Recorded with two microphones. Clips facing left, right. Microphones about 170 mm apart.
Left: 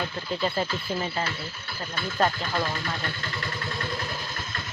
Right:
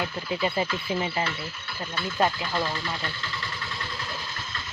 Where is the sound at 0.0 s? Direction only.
10° right (ahead or behind).